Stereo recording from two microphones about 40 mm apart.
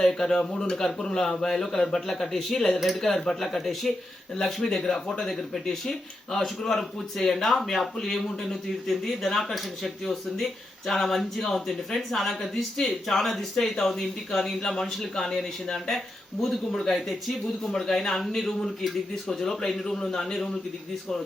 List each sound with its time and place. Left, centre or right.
0.0 s speech: centre